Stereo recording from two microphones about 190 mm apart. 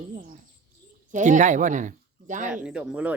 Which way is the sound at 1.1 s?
40° right (ahead or behind).